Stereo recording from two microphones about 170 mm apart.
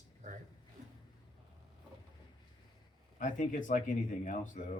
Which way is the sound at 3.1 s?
50° left (ahead or behind).